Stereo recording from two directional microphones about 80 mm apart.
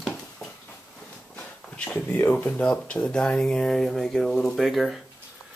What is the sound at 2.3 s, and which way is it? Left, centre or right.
Speech, centre.